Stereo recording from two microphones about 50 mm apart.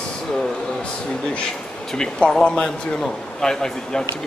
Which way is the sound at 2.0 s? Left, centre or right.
Centre.